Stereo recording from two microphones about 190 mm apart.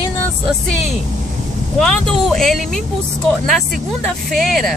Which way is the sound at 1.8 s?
Centre (ahead or behind).